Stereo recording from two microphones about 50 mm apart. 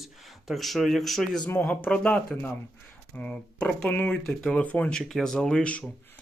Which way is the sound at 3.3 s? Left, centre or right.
Centre.